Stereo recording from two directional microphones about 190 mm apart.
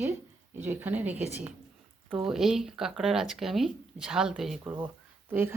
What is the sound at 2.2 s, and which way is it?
Speech, centre (ahead or behind).